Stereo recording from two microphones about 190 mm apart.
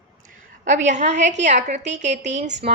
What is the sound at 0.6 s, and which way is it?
A woman's voice, 40° right (ahead or behind).